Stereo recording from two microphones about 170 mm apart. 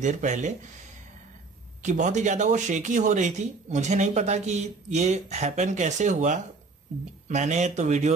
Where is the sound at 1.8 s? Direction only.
45° right (ahead or behind).